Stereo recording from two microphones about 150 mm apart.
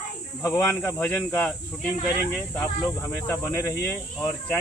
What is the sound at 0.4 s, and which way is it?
Speech, 20° left (ahead or behind).